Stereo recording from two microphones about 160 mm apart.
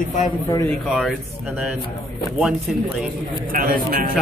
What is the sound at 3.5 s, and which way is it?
Speech, 65° right (ahead or behind).